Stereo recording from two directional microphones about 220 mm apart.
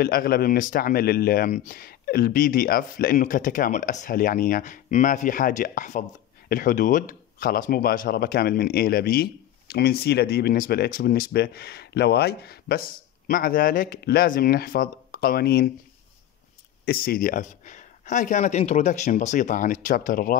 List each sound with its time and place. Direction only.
0.0 s speech: 45° left (ahead or behind)
16.8 s speech: 45° left (ahead or behind)